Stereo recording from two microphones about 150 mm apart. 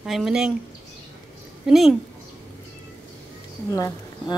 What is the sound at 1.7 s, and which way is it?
Speech, centre (ahead or behind).